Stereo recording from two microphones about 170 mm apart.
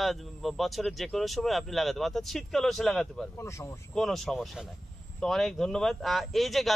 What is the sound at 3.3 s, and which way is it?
Speech, 15° left (ahead or behind).